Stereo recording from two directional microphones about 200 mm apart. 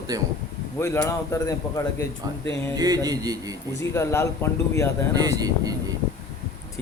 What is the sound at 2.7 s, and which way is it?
Speech, 20° right (ahead or behind).